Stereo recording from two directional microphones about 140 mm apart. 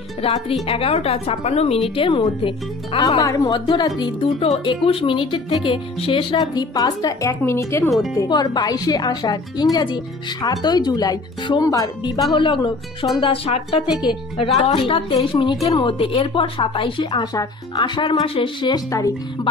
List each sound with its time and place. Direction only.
0.2 s a woman's voice: 40° left (ahead or behind)
3.2 s a woman's voice: 25° left (ahead or behind)
4.0 s a woman's voice: 45° left (ahead or behind); by 7.9 s 20° left (ahead or behind)
8.3 s a woman's voice: 30° left (ahead or behind)
15.1 s a woman's voice: 30° left (ahead or behind)
18.9 s speech: 25° left (ahead or behind)